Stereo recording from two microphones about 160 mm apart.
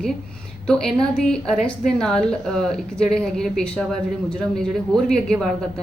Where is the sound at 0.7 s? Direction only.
5° left (ahead or behind).